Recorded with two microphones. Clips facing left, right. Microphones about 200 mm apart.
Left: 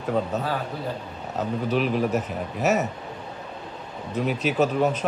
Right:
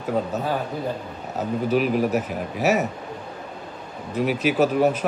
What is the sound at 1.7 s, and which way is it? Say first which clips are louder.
Speech: right 3 dB; 10° right (ahead or behind).